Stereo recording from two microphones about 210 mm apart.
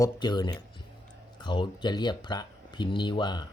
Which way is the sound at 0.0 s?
20° left (ahead or behind).